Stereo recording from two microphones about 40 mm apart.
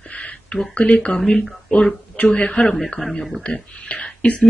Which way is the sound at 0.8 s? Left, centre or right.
Left.